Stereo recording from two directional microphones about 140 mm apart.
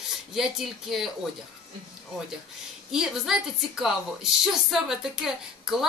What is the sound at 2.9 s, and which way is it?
A woman's voice, 5° right (ahead or behind).